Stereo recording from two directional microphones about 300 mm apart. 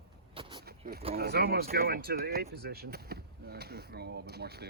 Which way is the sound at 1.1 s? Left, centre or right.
Right.